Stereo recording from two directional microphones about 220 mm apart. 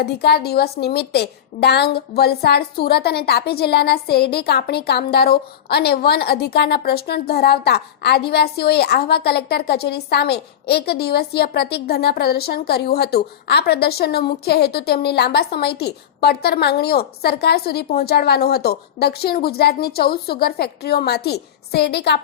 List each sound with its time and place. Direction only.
0.0 s a woman's voice: 45° left (ahead or behind)